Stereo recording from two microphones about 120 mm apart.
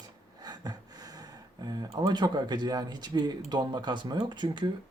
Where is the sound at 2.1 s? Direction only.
40° right (ahead or behind).